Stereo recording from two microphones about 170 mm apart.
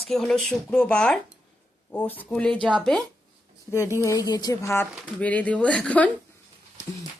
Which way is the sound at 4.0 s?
20° left (ahead or behind).